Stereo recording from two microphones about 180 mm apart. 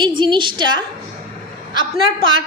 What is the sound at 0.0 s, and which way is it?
Speech, 25° right (ahead or behind).